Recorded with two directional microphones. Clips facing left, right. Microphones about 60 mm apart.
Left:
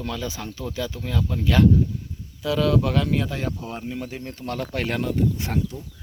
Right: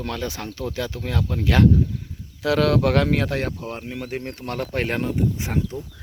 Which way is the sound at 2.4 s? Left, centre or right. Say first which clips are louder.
Right 3 dB; right.